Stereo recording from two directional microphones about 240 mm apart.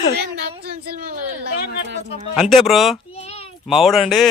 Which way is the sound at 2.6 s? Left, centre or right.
Centre.